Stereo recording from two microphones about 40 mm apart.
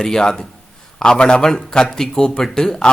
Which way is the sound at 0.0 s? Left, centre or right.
Centre.